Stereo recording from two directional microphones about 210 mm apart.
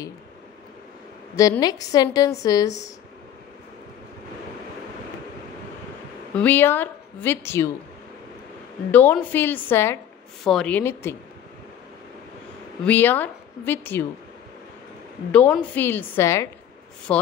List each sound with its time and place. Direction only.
1.3 s a woman's voice: 15° left (ahead or behind)
6.3 s a woman's voice: 10° left (ahead or behind)
8.9 s a woman's voice: 10° left (ahead or behind)
12.8 s a woman's voice: 10° left (ahead or behind)
15.5 s a woman's voice: 10° left (ahead or behind)